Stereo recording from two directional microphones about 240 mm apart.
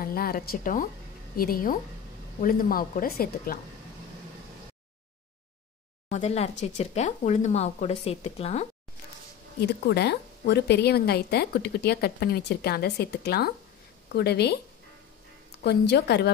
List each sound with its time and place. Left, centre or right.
0.0 s a woman's voice: left
6.0 s speech: left
9.6 s a woman's voice: left
15.6 s a woman's voice: left